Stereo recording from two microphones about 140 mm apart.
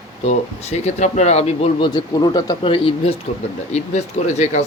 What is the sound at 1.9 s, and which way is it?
Speech, 30° left (ahead or behind).